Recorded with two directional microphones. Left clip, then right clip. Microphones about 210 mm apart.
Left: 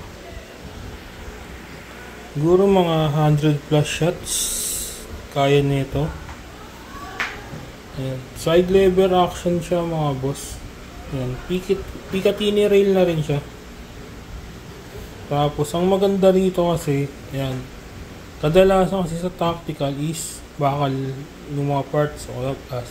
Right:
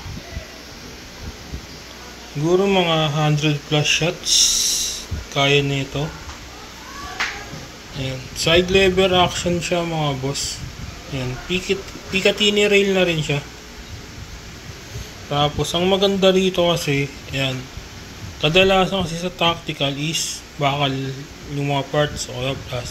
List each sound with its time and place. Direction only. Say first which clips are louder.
2.5 s speech: left 1 dB; 15° left (ahead or behind)
8.0 s speech: right 3 dB; 5° left (ahead or behind)
11.4 s speech: right 1 dB; 5° left (ahead or behind)
15.2 s speech: right 1 dB; 10° left (ahead or behind)